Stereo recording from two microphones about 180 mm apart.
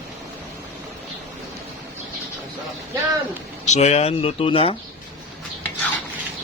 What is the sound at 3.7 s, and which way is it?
Speech, 40° left (ahead or behind).